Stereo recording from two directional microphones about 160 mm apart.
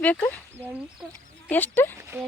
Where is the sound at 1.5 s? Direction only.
10° left (ahead or behind).